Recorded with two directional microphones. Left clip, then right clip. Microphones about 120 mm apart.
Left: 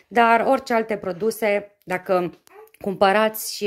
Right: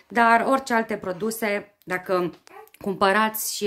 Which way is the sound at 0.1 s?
30° left (ahead or behind).